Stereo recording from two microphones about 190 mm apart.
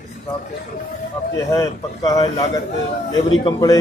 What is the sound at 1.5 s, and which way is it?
Speech, 15° left (ahead or behind).